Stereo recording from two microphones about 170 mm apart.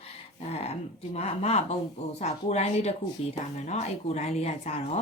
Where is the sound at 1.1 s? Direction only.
40° left (ahead or behind).